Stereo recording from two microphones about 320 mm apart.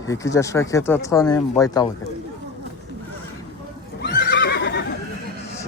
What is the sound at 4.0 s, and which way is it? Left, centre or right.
Neigh, left.